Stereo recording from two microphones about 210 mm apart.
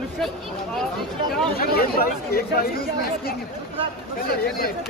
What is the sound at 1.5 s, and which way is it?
Speech, 45° left (ahead or behind).